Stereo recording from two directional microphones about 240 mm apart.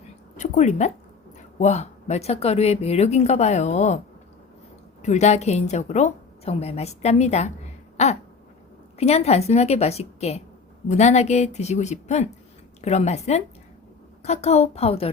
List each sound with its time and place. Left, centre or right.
0.3 s a woman's voice: left
5.0 s a woman's voice: left